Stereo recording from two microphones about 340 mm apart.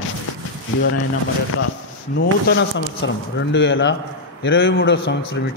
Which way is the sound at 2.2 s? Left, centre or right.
Left.